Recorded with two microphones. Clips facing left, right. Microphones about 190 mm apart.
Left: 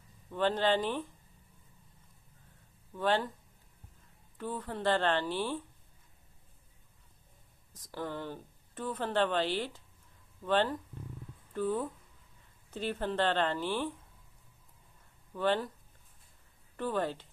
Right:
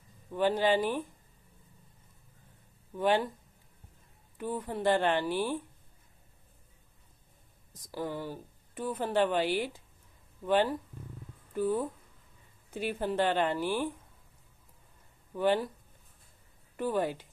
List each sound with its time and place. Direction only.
0.3 s a woman's voice: 10° right (ahead or behind)
2.9 s a woman's voice: 15° right (ahead or behind)
4.4 s a woman's voice: 15° right (ahead or behind)
7.7 s a woman's voice: 10° right (ahead or behind)
15.3 s a woman's voice: 10° right (ahead or behind)
16.7 s a woman's voice: 10° right (ahead or behind)